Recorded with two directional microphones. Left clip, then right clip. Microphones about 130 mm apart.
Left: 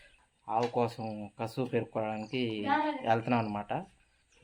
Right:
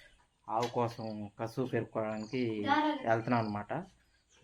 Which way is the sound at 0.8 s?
15° left (ahead or behind).